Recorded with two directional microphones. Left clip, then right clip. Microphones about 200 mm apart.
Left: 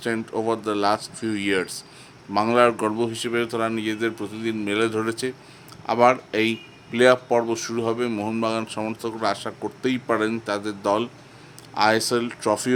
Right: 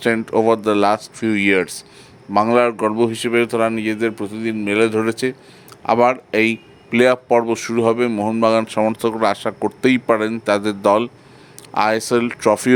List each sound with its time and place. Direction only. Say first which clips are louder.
0.0 s speech: right 9 dB; 35° right (ahead or behind)
8.1 s speech: right 7 dB; 20° right (ahead or behind)
8.4 s speech: right 13 dB; 35° right (ahead or behind)